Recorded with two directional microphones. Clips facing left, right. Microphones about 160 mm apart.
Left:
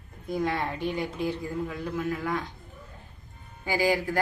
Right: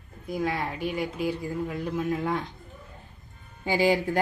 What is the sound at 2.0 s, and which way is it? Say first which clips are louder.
Speech: right 2 dB; 25° right (ahead or behind).